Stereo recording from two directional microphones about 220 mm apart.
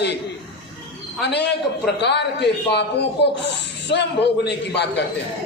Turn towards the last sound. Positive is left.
turn(degrees=50)  # may be behind; listen again after turning